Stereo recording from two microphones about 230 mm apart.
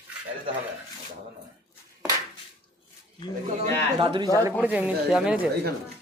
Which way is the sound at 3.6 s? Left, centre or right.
Right.